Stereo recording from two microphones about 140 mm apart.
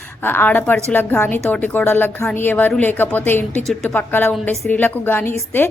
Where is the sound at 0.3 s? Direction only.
15° left (ahead or behind).